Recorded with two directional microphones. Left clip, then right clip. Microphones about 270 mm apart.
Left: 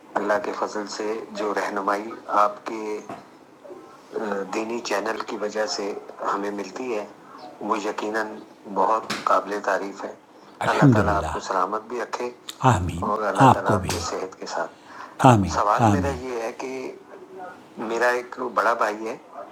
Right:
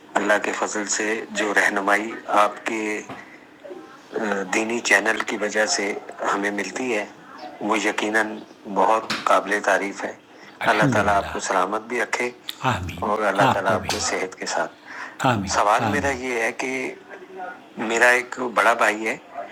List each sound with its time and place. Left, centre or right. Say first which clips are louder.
0.1 s speech: right 3 dB; centre
4.1 s speech: right 4 dB; centre
12.5 s speech: left 3 dB; left
13.0 s speech: right 2 dB; right